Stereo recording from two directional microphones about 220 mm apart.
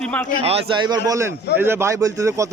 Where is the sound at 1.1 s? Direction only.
10° right (ahead or behind).